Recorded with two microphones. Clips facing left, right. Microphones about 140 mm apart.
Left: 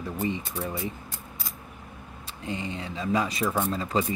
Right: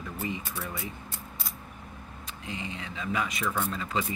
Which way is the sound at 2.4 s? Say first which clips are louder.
Left 5 dB; 35° left (ahead or behind).